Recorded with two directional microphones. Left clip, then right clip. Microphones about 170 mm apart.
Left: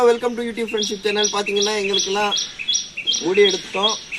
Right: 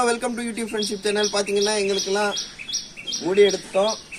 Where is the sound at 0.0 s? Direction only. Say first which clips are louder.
Left 6 dB; 25° right (ahead or behind).